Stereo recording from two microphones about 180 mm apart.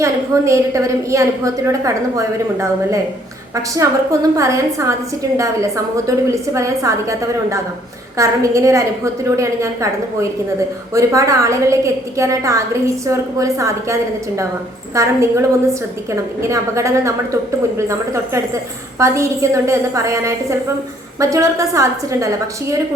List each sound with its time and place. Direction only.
0.0 s a woman's voice: 15° right (ahead or behind)